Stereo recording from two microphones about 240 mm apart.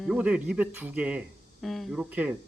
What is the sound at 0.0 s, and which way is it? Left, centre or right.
Speech, centre.